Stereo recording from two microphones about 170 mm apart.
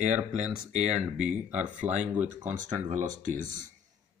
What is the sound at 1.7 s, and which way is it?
Speech, 45° right (ahead or behind).